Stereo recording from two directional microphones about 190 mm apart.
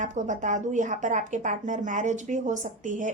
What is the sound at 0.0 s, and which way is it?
Speech, 40° right (ahead or behind).